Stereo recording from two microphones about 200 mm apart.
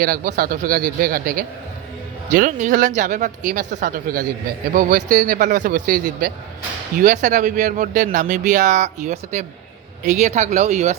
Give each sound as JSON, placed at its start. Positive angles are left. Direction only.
{"t": 0.0, "sound": "a man's voice", "side_deg": -45}